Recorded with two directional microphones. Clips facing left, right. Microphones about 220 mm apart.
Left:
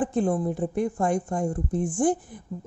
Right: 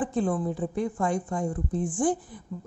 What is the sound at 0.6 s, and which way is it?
Speech, 45° left (ahead or behind).